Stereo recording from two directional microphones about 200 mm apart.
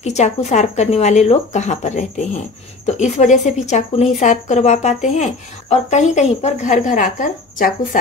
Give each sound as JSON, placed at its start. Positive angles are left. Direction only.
{"t": 0.0, "sound": "a woman's voice", "side_deg": 35}